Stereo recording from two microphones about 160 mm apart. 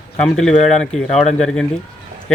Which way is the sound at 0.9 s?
45° left (ahead or behind).